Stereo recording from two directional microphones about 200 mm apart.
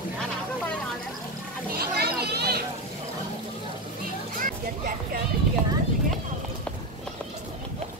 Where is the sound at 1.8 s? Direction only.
50° right (ahead or behind).